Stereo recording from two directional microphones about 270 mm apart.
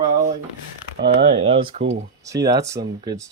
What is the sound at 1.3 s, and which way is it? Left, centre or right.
Speech, centre.